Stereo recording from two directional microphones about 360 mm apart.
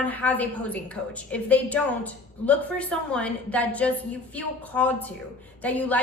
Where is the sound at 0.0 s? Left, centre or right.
Centre.